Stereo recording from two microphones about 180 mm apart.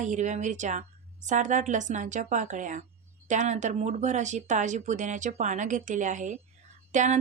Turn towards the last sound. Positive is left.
turn(degrees=-45)  # may be behind; listen again after turning